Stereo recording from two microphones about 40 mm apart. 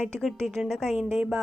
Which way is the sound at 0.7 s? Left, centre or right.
Centre.